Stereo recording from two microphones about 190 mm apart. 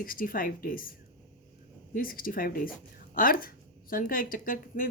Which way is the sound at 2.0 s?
50° left (ahead or behind).